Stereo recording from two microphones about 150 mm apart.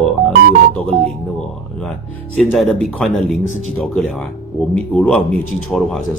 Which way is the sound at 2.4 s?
Centre (ahead or behind).